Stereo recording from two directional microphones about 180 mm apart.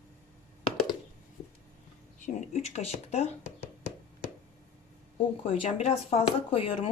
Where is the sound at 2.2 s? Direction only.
40° left (ahead or behind).